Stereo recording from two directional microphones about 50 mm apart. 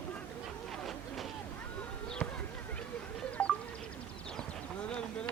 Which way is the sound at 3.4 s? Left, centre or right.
Centre.